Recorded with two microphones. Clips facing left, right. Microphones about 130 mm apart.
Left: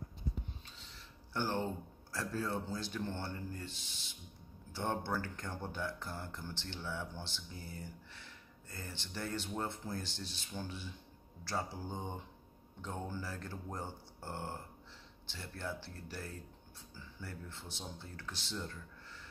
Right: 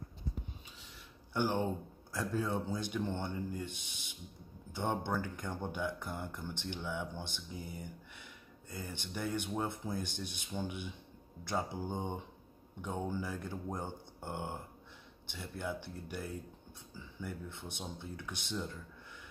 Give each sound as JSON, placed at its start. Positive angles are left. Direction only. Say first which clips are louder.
{"t": 1.3, "sound": "speech", "louder": "right 3 dB", "side_deg": -15}
{"t": 4.7, "sound": "speech", "louder": "right 2 dB", "side_deg": -20}